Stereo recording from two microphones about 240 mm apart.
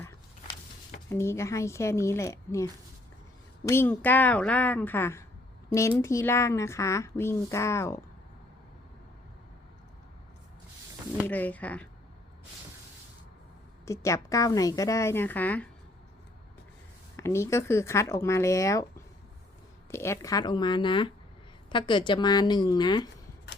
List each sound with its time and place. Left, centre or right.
1.1 s speech: centre
3.7 s speech: centre
11.3 s speech: centre
13.8 s speech: centre
17.2 s speech: centre